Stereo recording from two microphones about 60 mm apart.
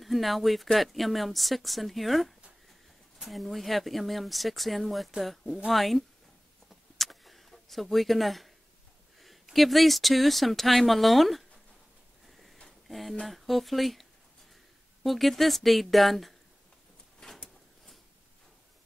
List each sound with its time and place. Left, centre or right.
0.0 s speech: centre
6.7 s a sound: centre
9.2 s speech: centre
12.3 s a sound: centre
12.8 s speech: centre
15.0 s speech: centre